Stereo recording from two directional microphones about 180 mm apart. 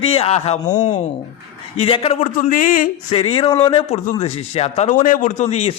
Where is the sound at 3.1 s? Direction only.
35° left (ahead or behind).